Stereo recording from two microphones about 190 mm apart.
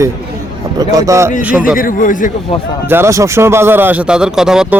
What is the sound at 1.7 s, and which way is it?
Speech, 50° left (ahead or behind).